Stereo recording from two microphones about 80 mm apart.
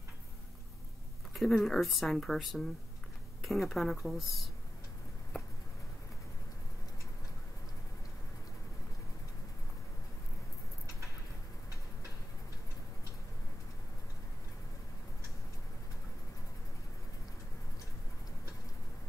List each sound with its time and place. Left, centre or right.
1.5 s speech: centre